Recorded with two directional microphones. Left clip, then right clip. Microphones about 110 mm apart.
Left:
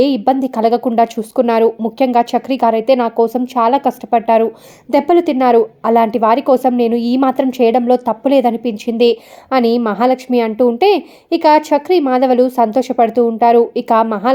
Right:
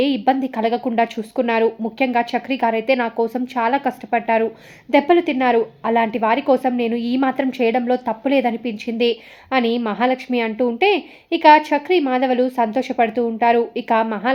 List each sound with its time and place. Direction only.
0.0 s a woman's voice: 35° left (ahead or behind)